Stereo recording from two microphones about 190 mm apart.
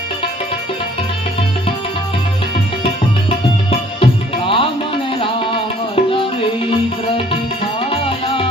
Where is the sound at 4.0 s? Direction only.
30° left (ahead or behind).